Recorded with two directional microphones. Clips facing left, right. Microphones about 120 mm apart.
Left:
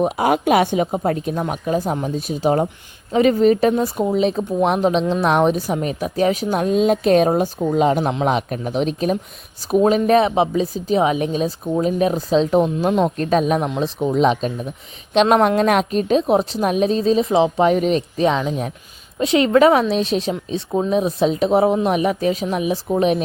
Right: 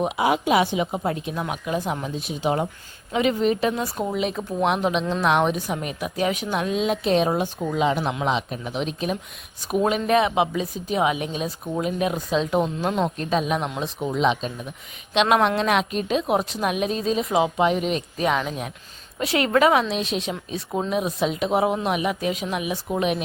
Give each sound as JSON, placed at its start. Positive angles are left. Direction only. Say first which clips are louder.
{"t": 0.0, "sound": "speech", "louder": "left 4 dB", "side_deg": 50}
{"t": 12.6, "sound": "speech", "louder": "left 6 dB", "side_deg": 15}
{"t": 13.1, "sound": "speech", "louder": "left 6 dB", "side_deg": 45}
{"t": 17.6, "sound": "speech", "louder": "left 5 dB", "side_deg": 40}
{"t": 18.2, "sound": "speech", "louder": "left 2 dB", "side_deg": 30}
{"t": 19.9, "sound": "speech", "louder": "left 7 dB", "side_deg": 35}